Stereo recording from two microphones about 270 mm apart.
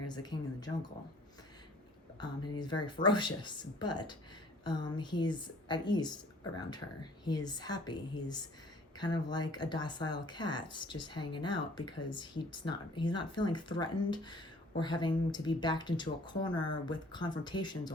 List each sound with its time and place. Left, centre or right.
0.1 s speech: centre
2.2 s speech: centre